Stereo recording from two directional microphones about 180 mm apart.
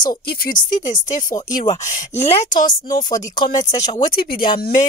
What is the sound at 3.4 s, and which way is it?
Speech, 20° left (ahead or behind).